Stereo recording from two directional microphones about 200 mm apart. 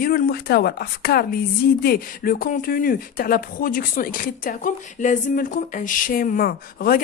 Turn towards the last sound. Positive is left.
turn(degrees=45)  # may be behind; listen again after turning